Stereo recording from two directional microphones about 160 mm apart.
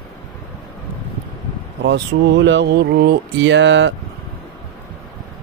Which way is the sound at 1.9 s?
90° right.